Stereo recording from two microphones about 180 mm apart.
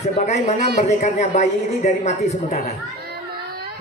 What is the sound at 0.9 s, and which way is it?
A woman's voice, 40° left (ahead or behind).